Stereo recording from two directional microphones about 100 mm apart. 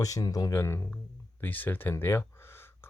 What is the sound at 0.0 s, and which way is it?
Speech, 35° left (ahead or behind).